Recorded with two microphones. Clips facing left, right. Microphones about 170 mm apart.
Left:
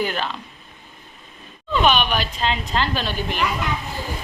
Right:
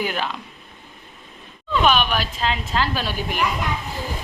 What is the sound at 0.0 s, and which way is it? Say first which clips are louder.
Speech: left 1 dB; 10° right (ahead or behind).